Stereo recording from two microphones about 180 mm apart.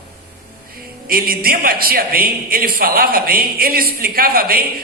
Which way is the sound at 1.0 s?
55° right (ahead or behind).